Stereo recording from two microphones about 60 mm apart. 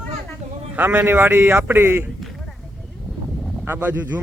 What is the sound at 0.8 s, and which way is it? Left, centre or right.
A man's voice, right.